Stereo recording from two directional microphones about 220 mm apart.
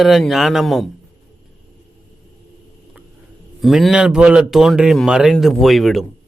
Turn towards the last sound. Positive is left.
turn(degrees=0)  # may be behind; listen again after turning